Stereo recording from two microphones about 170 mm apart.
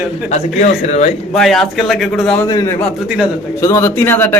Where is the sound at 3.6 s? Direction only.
15° left (ahead or behind).